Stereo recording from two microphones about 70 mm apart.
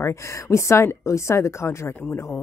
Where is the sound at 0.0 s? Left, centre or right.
Left.